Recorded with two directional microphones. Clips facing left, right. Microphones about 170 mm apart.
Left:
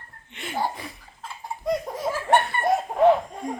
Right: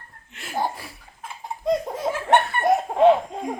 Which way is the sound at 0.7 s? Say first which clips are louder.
Left 2 dB; 5° right (ahead or behind).